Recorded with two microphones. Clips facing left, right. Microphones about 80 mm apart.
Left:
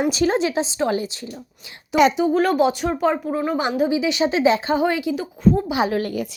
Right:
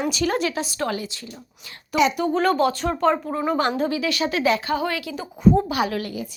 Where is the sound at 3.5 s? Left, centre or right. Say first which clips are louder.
Left 3 dB; centre.